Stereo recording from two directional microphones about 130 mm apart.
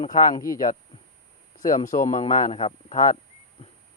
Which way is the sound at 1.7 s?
75° left (ahead or behind).